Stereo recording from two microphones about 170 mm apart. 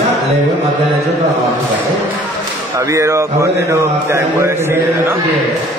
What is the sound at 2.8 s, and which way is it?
Mantra, 15° right (ahead or behind).